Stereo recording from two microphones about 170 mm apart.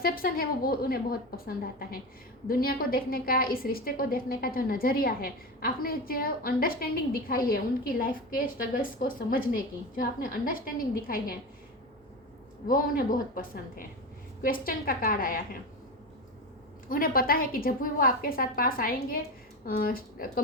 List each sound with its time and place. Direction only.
0.0 s a woman's voice: 60° left (ahead or behind)
12.6 s a woman's voice: 55° left (ahead or behind)
16.9 s a woman's voice: 60° left (ahead or behind)